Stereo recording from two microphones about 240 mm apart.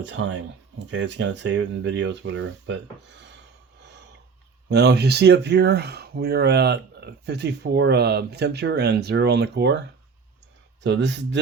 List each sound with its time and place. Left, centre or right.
0.0 s speech: right
4.7 s speech: right
10.8 s speech: right